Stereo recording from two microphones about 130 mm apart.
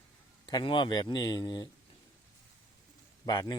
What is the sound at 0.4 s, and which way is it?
Speech, 40° left (ahead or behind).